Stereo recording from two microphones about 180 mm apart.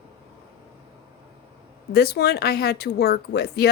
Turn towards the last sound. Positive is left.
turn(degrees=65)  # may be behind; listen again after turning